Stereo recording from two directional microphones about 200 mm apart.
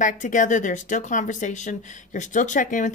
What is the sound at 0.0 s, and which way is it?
A woman's voice, 40° left (ahead or behind).